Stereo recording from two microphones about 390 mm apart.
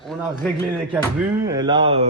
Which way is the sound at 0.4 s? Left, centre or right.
Centre.